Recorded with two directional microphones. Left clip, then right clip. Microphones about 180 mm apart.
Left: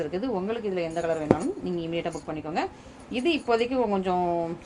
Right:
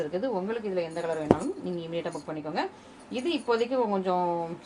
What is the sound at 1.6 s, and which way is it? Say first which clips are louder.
A woman's voice: left 3 dB; 40° left (ahead or behind).